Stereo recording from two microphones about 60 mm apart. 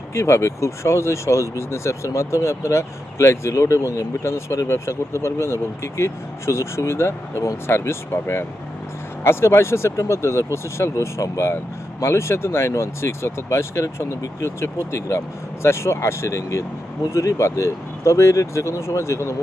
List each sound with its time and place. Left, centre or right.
0.1 s speech: left